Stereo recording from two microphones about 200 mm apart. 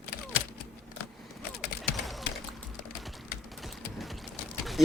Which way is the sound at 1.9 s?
Centre (ahead or behind).